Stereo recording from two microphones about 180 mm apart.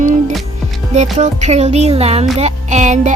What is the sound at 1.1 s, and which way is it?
Speech, 40° right (ahead or behind).